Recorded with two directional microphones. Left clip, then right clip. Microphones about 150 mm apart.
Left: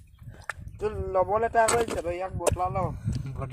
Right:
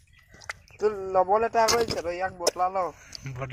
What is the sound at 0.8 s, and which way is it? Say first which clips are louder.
Speech: right 3 dB; 35° right (ahead or behind).